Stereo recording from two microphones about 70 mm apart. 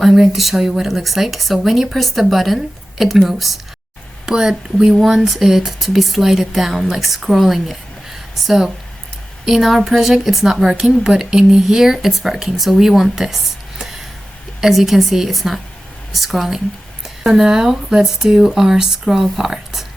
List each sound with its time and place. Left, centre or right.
0.0 s a woman's voice: centre